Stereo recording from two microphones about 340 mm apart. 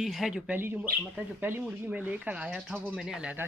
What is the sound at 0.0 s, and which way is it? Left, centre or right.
Speech, centre.